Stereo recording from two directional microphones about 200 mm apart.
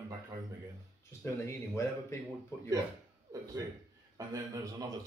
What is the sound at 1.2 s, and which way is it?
Speech, 15° left (ahead or behind).